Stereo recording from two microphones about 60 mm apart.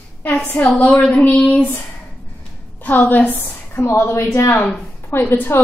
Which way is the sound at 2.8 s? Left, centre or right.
Left.